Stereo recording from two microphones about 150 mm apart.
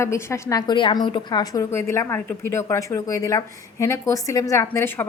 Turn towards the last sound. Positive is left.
turn(degrees=15)  # may be behind; listen again after turning